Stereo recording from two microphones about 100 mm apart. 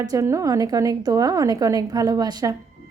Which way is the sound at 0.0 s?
35° right (ahead or behind).